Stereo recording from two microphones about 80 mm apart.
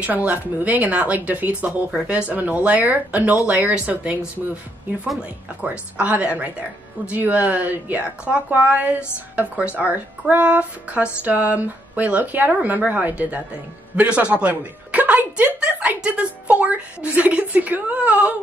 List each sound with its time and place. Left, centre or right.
0.0 s speech: centre
5.6 s a woman's voice: centre